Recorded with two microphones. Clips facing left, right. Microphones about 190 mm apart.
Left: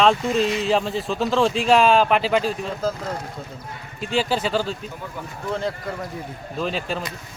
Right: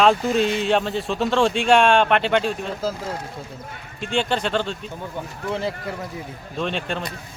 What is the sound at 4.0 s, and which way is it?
Speech, 5° left (ahead or behind).